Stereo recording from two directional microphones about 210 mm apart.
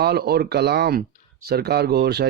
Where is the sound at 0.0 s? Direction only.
50° right (ahead or behind).